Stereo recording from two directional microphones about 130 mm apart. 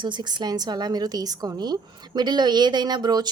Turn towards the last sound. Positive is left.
turn(degrees=-30)  # may be behind; listen again after turning